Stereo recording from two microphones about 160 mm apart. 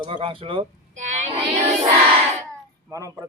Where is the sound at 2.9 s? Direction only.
20° right (ahead or behind).